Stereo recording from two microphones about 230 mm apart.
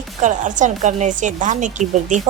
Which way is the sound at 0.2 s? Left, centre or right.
Right.